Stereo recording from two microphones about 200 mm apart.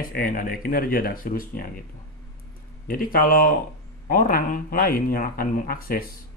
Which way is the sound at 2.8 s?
45° left (ahead or behind).